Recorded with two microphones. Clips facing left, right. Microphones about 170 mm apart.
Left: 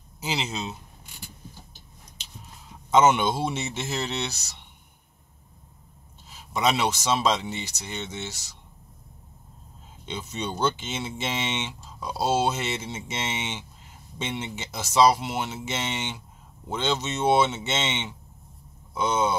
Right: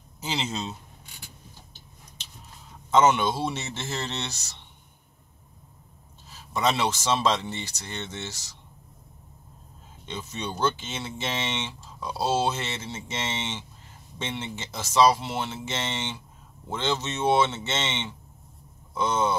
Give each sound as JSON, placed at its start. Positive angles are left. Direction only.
{"t": 0.2, "sound": "speech", "side_deg": 10}
{"t": 2.9, "sound": "speech", "side_deg": 20}
{"t": 6.3, "sound": "speech", "side_deg": 15}
{"t": 10.0, "sound": "speech", "side_deg": 15}